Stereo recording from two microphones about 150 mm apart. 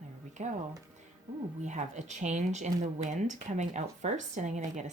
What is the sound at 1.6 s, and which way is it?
Speech, 55° right (ahead or behind).